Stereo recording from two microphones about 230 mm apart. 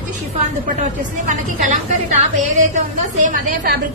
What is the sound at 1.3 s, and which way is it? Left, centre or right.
A woman's voice, right.